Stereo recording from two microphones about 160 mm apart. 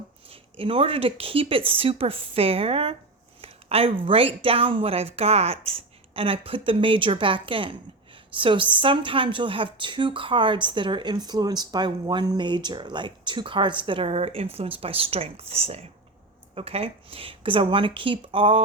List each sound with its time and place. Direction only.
0.3 s speech: 35° right (ahead or behind)
3.4 s a sound: 40° right (ahead or behind)
4.0 s speech: 35° right (ahead or behind)